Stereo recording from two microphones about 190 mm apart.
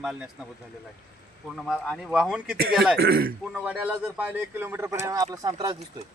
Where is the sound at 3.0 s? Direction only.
55° right (ahead or behind).